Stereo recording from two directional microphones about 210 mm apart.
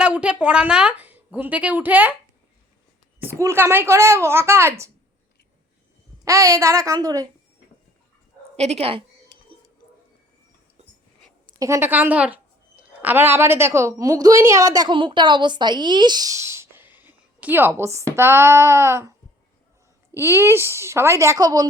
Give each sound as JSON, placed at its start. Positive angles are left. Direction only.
{"t": 0.0, "sound": "a woman's voice", "side_deg": -5}
{"t": 3.2, "sound": "a woman's voice", "side_deg": -15}
{"t": 6.2, "sound": "a woman's voice", "side_deg": -15}
{"t": 8.5, "sound": "speech", "side_deg": -30}
{"t": 10.8, "sound": "a sound", "side_deg": -30}
{"t": 11.4, "sound": "a woman's voice", "side_deg": -15}
{"t": 20.1, "sound": "a woman's voice", "side_deg": -10}